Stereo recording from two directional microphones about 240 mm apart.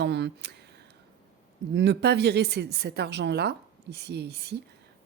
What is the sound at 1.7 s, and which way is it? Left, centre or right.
A woman's voice, right.